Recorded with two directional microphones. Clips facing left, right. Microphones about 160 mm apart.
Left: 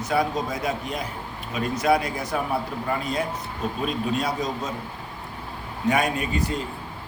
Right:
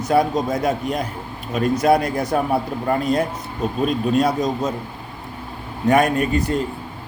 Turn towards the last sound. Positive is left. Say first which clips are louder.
# right 6 dB
turn(degrees=-50)  # may be behind; listen again after turning